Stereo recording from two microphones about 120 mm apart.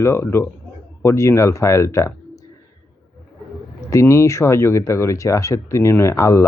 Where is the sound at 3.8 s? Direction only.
25° left (ahead or behind).